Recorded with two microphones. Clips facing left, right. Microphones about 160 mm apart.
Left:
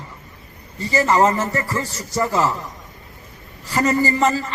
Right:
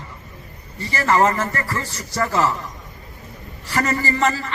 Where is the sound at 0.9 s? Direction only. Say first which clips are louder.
Left 1 dB; 20° left (ahead or behind).